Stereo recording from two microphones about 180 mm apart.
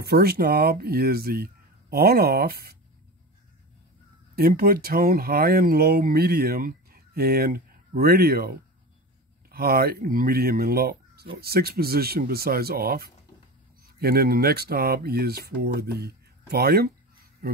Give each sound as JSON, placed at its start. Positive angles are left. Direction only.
{"t": 0.0, "sound": "speech", "side_deg": -60}
{"t": 4.4, "sound": "speech", "side_deg": -55}